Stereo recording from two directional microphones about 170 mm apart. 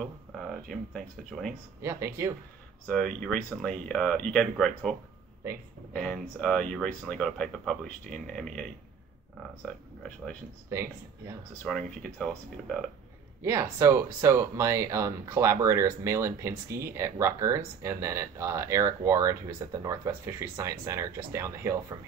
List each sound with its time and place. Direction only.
0.0 s speech: centre (ahead or behind)
1.8 s speech: 15° right (ahead or behind)
2.9 s speech: 5° left (ahead or behind)
5.9 s speech: 5° left (ahead or behind)
10.7 s speech: 15° right (ahead or behind)
11.6 s speech: 5° left (ahead or behind)
13.4 s speech: 15° right (ahead or behind)